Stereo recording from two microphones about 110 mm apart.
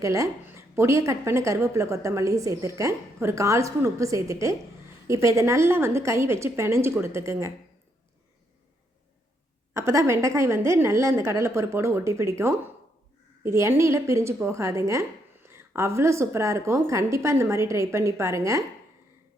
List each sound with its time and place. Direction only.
0.0 s a woman's voice: 30° right (ahead or behind)
9.7 s a woman's voice: 25° right (ahead or behind)